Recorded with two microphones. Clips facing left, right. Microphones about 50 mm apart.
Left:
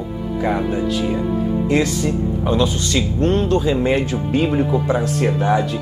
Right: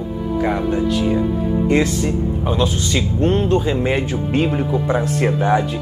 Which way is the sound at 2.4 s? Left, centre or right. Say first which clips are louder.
Left 2 dB; centre.